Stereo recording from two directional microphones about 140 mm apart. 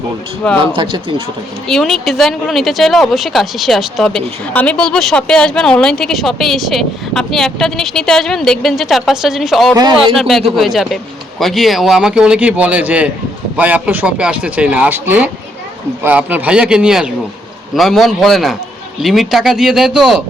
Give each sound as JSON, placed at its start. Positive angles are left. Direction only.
{"t": 0.6, "sound": "speech", "side_deg": -40}
{"t": 1.6, "sound": "speech", "side_deg": 0}